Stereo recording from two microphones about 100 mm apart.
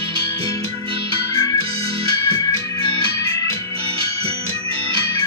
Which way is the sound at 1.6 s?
75° right (ahead or behind).